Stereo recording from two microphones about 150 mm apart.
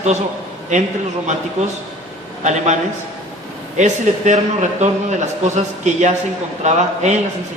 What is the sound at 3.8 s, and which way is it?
A man's voice, 55° right (ahead or behind).